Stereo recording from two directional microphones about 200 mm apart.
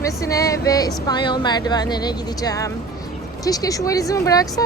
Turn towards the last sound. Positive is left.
turn(degrees=15)  # may be behind; listen again after turning